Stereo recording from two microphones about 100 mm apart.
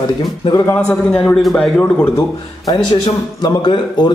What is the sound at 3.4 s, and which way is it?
Speech, 50° left (ahead or behind).